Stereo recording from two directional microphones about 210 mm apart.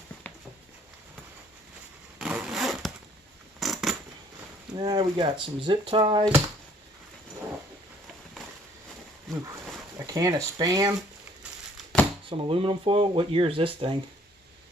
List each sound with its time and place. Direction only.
2.1 s a sound: 5° right (ahead or behind)
3.6 s scissors: centre (ahead or behind)
4.7 s speech: 20° right (ahead or behind)
10.0 s speech: 15° right (ahead or behind)
12.3 s speech: 25° right (ahead or behind)